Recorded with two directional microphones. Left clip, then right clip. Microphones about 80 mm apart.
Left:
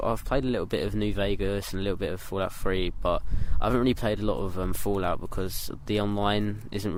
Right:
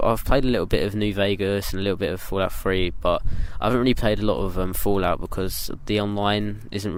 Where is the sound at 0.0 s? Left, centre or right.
Right.